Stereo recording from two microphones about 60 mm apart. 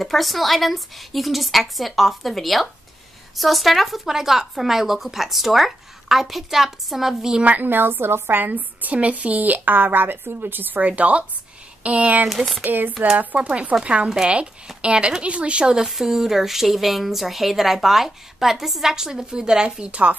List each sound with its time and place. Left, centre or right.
0.0 s speech: centre
7.4 s a woman's voice: right
10.9 s speech: right
12.3 s speech: centre
12.6 s a woman's voice: right